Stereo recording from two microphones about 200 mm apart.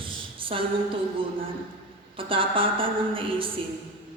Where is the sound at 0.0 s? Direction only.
25° right (ahead or behind).